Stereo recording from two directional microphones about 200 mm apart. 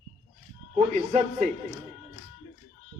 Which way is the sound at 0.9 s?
35° right (ahead or behind).